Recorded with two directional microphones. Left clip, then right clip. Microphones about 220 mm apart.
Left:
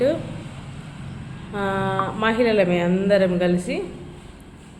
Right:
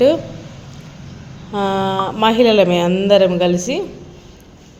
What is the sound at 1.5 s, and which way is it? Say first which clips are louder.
A man's voice: right 6 dB; 30° right (ahead or behind).